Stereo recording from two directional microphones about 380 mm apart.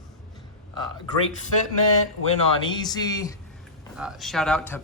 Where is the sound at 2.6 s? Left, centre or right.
Centre.